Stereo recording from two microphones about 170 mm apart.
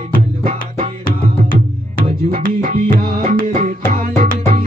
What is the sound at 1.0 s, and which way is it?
Music, 55° left (ahead or behind).